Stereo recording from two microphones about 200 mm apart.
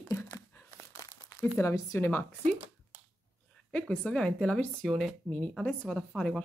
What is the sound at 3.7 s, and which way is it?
Speech, 5° left (ahead or behind).